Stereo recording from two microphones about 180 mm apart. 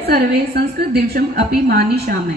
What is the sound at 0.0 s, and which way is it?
A woman's voice, 65° right (ahead or behind).